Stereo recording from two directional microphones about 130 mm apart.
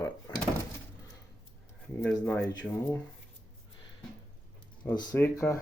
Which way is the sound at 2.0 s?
10° left (ahead or behind).